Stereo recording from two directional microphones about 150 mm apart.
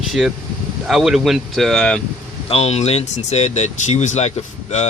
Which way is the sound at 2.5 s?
45° left (ahead or behind).